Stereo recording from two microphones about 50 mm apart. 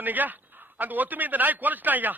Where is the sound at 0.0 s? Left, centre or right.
Right.